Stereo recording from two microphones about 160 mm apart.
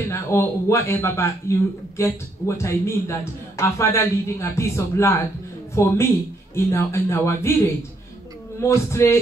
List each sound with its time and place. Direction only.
0.1 s a man's voice: 15° left (ahead or behind)
8.5 s a man's voice: 15° left (ahead or behind)